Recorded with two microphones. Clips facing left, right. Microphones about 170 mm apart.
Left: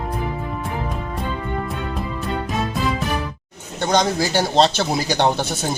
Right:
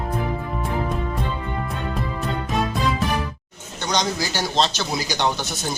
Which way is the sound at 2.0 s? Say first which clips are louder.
Left 1 dB; centre (ahead or behind).